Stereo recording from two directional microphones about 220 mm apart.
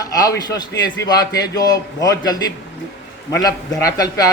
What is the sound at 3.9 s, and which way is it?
Speech, 15° left (ahead or behind).